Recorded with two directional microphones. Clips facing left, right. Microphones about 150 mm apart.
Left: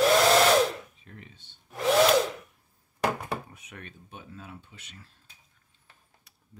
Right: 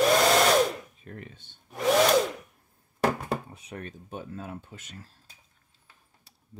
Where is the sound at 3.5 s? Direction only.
30° right (ahead or behind).